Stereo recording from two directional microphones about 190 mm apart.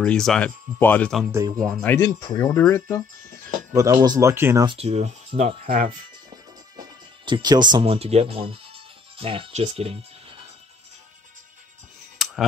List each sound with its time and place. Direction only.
0.0 s speech: 5° left (ahead or behind)
1.3 s speech: 20° right (ahead or behind)
1.6 s speech: 5° left (ahead or behind)
3.7 s speech: 20° right (ahead or behind)
4.6 s speech: 35° right (ahead or behind)
6.8 s music: 25° right (ahead or behind)
7.7 s speech: 30° right (ahead or behind)
12.2 s a sound: centre (ahead or behind)